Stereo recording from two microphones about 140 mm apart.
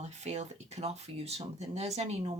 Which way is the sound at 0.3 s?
50° right (ahead or behind).